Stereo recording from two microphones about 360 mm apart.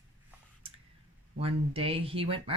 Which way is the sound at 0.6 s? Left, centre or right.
Centre.